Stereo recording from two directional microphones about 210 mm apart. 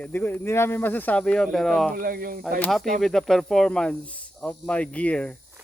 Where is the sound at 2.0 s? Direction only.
45° right (ahead or behind).